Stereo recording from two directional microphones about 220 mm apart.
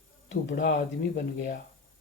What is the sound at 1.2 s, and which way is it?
Speech, 45° left (ahead or behind).